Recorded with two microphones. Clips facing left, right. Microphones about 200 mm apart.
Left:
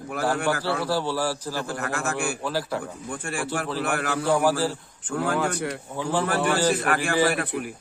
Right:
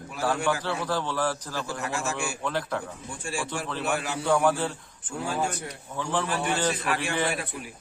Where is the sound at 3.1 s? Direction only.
60° left (ahead or behind).